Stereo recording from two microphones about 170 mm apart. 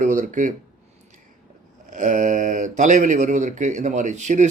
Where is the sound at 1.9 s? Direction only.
50° right (ahead or behind).